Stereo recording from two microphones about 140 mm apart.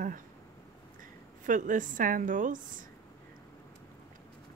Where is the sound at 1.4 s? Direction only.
70° right (ahead or behind).